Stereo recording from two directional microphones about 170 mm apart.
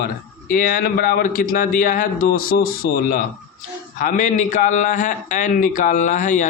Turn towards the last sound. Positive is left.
turn(degrees=50)  # may be behind; listen again after turning